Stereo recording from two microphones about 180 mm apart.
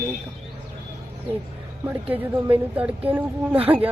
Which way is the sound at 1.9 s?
10° right (ahead or behind).